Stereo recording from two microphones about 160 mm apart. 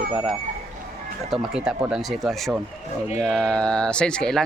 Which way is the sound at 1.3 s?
5° right (ahead or behind).